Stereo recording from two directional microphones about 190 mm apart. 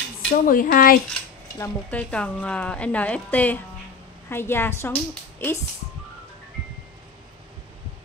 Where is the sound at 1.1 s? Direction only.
5° left (ahead or behind).